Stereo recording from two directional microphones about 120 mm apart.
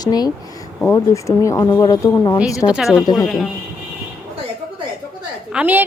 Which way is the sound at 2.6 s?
5° right (ahead or behind).